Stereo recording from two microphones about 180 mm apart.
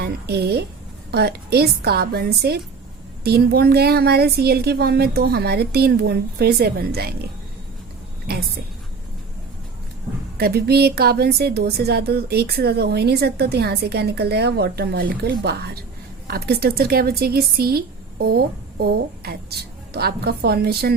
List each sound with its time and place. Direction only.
0.0 s a woman's voice: 60° right (ahead or behind)
10.3 s a woman's voice: 60° right (ahead or behind)